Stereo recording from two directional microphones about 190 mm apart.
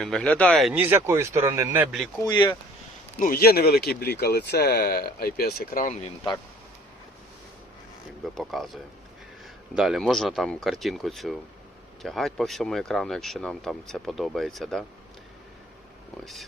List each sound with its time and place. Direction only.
0.0 s speech: 5° left (ahead or behind)
0.8 s speech: 10° right (ahead or behind)
2.2 s speech: 25° left (ahead or behind)
3.2 s speech: 50° left (ahead or behind)
8.4 s speech: centre (ahead or behind)
16.2 s speech: centre (ahead or behind)